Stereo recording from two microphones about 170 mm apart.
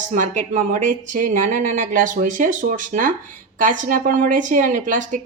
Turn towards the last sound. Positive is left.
turn(degrees=-50)  # may be behind; listen again after turning